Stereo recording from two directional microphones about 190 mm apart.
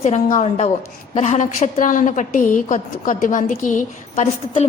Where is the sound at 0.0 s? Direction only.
40° left (ahead or behind).